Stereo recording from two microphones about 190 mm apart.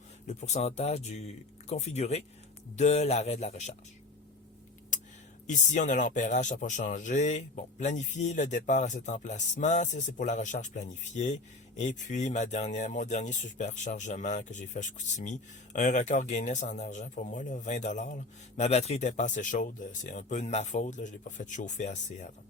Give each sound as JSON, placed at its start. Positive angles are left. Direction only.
{"t": 0.3, "sound": "speech", "side_deg": 35}
{"t": 5.5, "sound": "speech", "side_deg": 40}